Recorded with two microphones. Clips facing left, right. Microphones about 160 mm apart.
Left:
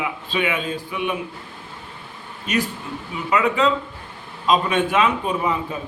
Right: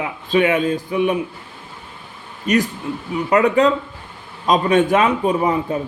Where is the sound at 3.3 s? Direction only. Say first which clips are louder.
Right 4 dB; 45° right (ahead or behind).